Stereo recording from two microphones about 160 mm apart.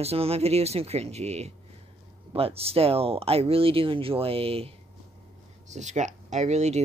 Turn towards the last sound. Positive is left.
turn(degrees=-45)  # may be behind; listen again after turning